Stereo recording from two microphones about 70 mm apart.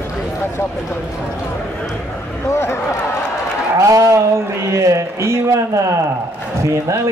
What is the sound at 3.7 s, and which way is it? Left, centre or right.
A man's voice, right.